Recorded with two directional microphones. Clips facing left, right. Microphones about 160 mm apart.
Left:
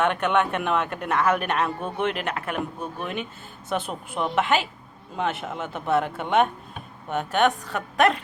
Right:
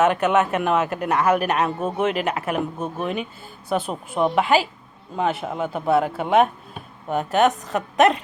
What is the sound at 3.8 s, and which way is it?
Speech, 40° right (ahead or behind).